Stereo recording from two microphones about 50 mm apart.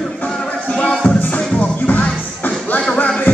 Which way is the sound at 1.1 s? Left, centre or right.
Left.